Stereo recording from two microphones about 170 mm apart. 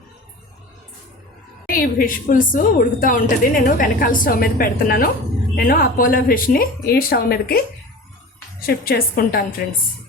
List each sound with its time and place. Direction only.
1.7 s a woman's voice: 55° left (ahead or behind)
8.6 s a woman's voice: 60° left (ahead or behind)